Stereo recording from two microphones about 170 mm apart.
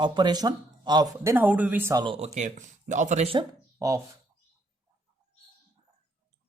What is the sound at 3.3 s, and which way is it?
Speech, 20° right (ahead or behind).